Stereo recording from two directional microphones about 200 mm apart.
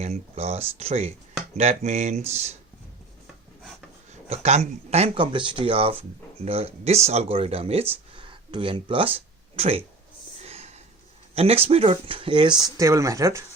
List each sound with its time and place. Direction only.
0.0 s speech: 30° right (ahead or behind)
4.3 s speech: 35° right (ahead or behind)
10.3 s a sound: 30° right (ahead or behind)
11.3 s speech: 30° right (ahead or behind)